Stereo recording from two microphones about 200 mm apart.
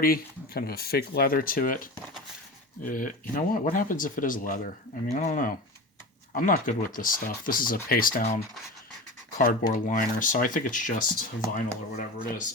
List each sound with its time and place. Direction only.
0.0 s speech: 45° left (ahead or behind)
2.9 s speech: 40° left (ahead or behind)
9.4 s speech: 45° left (ahead or behind)